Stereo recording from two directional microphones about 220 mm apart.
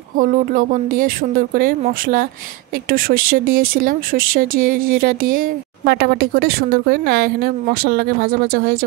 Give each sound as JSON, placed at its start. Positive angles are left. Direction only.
{"t": 0.2, "sound": "speech", "side_deg": -40}